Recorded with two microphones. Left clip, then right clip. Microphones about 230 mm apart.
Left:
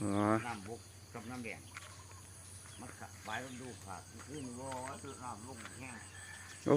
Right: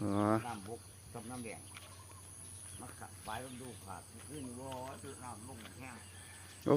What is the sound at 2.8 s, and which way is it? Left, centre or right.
Speech, centre.